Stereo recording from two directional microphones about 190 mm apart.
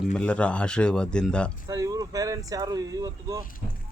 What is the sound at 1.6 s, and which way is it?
Speech, 15° right (ahead or behind).